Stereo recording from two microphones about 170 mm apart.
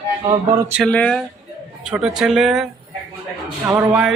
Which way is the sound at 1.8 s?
5° right (ahead or behind).